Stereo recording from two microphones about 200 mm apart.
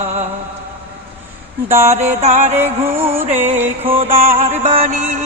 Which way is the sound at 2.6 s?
10° right (ahead or behind).